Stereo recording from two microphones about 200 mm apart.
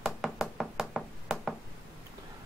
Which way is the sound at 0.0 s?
5° right (ahead or behind).